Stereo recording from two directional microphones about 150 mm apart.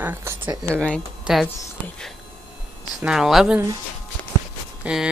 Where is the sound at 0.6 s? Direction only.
5° left (ahead or behind).